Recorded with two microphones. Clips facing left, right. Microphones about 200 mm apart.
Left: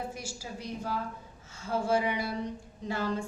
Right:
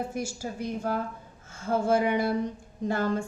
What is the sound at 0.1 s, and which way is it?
Speech, 50° right (ahead or behind).